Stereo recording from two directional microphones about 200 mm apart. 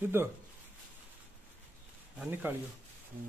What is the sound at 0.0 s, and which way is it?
Speech, 10° right (ahead or behind).